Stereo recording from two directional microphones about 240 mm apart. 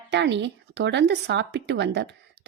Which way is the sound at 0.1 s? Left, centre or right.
Right.